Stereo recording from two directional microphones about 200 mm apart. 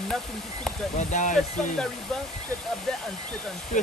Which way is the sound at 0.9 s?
40° left (ahead or behind).